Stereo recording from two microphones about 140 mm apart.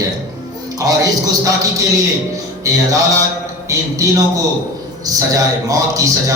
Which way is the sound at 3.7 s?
20° right (ahead or behind).